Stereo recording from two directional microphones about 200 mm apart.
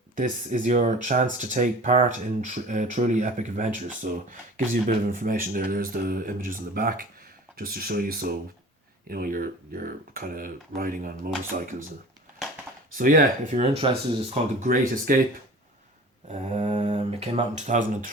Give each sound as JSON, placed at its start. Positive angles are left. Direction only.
{"t": 0.2, "sound": "speech", "side_deg": -40}
{"t": 13.0, "sound": "speech", "side_deg": -45}
{"t": 13.6, "sound": "speech", "side_deg": -25}
{"t": 14.3, "sound": "speech", "side_deg": -40}
{"t": 16.3, "sound": "speech", "side_deg": -35}